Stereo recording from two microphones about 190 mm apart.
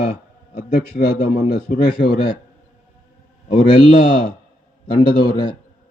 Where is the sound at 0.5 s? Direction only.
55° left (ahead or behind).